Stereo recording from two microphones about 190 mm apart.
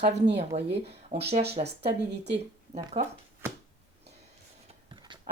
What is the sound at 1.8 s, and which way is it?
Speech, 65° right (ahead or behind).